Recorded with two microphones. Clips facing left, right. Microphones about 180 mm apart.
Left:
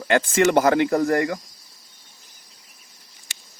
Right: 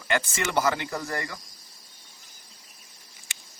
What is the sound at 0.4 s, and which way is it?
Speech, 55° left (ahead or behind).